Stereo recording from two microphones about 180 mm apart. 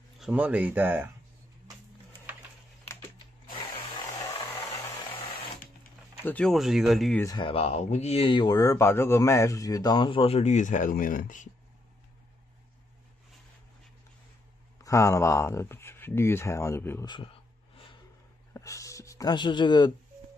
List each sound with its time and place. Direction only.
0.2 s speech: 5° right (ahead or behind)
6.2 s speech: 5° left (ahead or behind)
7.2 s speech: 20° left (ahead or behind)
7.4 s speech: 35° left (ahead or behind); by 11.4 s 50° left (ahead or behind)
14.8 s speech: 15° left (ahead or behind)
17.1 s a sound: 30° left (ahead or behind)
18.5 s a sound: 20° left (ahead or behind)